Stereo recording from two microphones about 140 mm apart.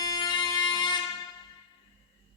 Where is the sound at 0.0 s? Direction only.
30° left (ahead or behind).